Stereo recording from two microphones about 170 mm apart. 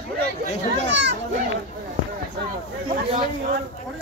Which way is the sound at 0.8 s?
90° right.